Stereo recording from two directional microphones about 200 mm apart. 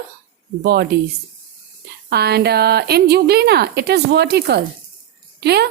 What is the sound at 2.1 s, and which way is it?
Speech, 55° right (ahead or behind).